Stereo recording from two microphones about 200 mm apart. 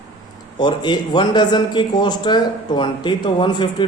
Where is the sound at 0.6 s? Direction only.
20° left (ahead or behind).